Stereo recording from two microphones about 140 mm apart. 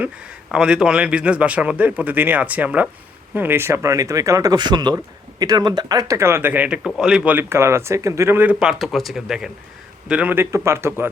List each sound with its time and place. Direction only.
0.5 s speech: 5° right (ahead or behind)